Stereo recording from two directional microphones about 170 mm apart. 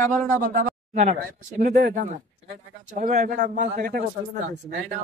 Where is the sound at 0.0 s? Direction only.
50° right (ahead or behind).